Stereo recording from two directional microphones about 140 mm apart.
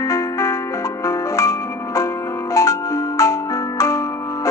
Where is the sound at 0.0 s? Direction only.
20° left (ahead or behind).